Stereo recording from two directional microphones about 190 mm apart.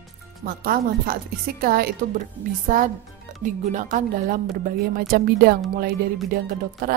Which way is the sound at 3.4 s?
40° right (ahead or behind).